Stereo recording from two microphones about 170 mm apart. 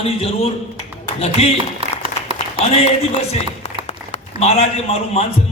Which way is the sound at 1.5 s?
30° right (ahead or behind).